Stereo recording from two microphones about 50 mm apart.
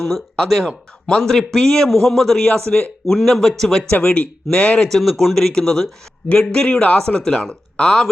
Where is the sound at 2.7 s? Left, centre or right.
Centre.